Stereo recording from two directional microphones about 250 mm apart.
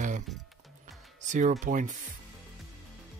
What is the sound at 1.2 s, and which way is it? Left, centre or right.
Speech, right.